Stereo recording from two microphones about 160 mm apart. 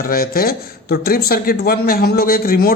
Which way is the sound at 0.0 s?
65° left (ahead or behind).